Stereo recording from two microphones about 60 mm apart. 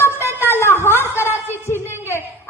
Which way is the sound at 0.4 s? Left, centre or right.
Left.